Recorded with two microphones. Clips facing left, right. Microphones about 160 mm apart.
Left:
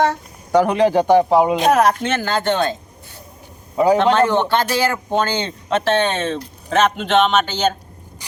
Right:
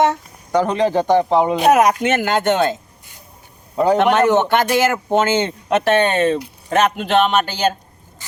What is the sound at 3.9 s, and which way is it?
Speech, 15° right (ahead or behind).